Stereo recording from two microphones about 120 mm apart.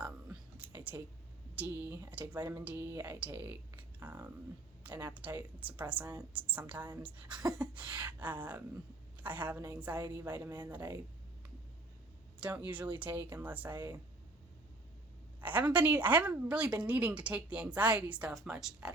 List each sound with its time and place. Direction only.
0.0 s a sound: 15° right (ahead or behind)
1.5 s a woman's voice: 15° right (ahead or behind)
12.4 s a woman's voice: 15° right (ahead or behind)
15.4 s a woman's voice: 15° right (ahead or behind)